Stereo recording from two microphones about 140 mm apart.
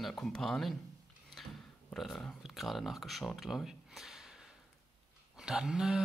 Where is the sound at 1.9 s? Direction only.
Centre (ahead or behind).